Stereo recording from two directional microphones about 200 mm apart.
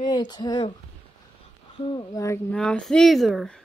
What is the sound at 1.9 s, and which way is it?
Speech, 15° left (ahead or behind).